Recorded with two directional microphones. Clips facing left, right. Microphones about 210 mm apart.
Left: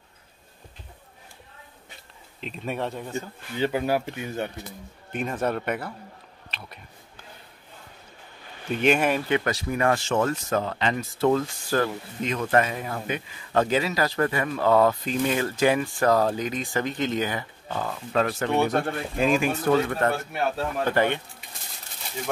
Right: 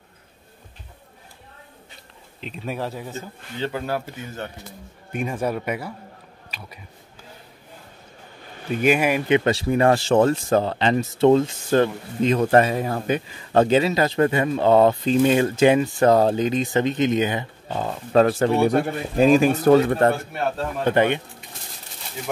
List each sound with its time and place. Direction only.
2.4 s speech: centre (ahead or behind)
3.5 s speech: 15° left (ahead or behind)
5.1 s a man's voice: 10° right (ahead or behind)
8.8 s a man's voice: 10° right (ahead or behind)
9.3 s speech: 25° right (ahead or behind)
18.1 s speech: 35° right (ahead or behind)
18.6 s a man's voice: 10° right (ahead or behind)
19.1 s speech: 35° right (ahead or behind)
20.8 s speech: 20° right (ahead or behind)